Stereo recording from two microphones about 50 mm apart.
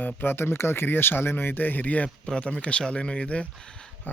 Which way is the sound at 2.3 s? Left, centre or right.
Centre.